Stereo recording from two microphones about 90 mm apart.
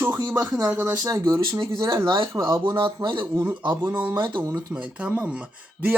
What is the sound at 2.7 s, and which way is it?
Speech, 65° right (ahead or behind).